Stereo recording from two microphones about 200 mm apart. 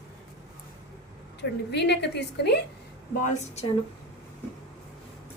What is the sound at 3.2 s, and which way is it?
Speech, 35° left (ahead or behind).